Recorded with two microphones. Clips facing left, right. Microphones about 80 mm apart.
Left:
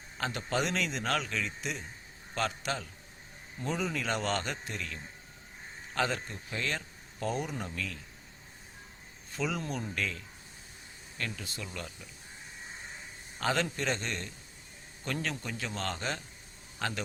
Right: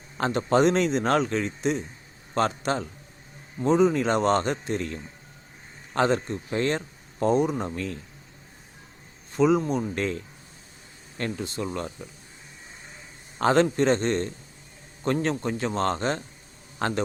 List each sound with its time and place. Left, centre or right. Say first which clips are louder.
0.2 s speech: right 11 dB; right
9.3 s speech: right 13 dB; right
9.9 s speech: right 8 dB; right
13.4 s speech: right 11 dB; right